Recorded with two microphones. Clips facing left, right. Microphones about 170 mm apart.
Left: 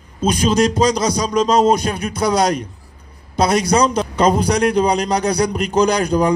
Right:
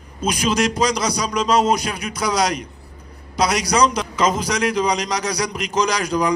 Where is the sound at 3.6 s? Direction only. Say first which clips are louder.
Left 3 dB; 50° left (ahead or behind).